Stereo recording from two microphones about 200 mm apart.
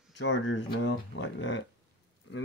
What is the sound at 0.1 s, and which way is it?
Speech, 65° left (ahead or behind).